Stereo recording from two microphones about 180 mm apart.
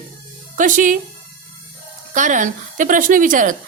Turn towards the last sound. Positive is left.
turn(degrees=-45)  # may be behind; listen again after turning